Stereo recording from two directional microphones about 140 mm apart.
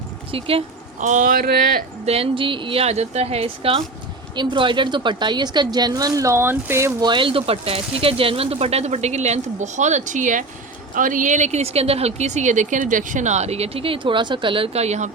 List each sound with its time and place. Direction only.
0.3 s speech: 40° right (ahead or behind)
0.9 s speech: 60° right (ahead or behind); by 1.8 s 90° right
2.0 s a woman's voice: 45° right (ahead or behind); by 6.9 s 20° right (ahead or behind)
7.0 s speech: 35° right (ahead or behind); by 15.1 s 55° right (ahead or behind)